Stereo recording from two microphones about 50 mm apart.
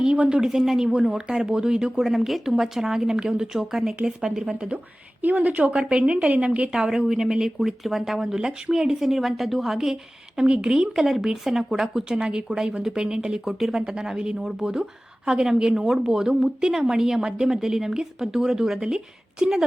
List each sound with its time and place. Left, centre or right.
0.0 s a woman's voice: centre
5.2 s a woman's voice: right
6.7 s a woman's voice: centre
8.4 s a woman's voice: centre